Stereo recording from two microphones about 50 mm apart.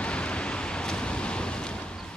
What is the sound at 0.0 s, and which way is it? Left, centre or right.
Vehicle, left.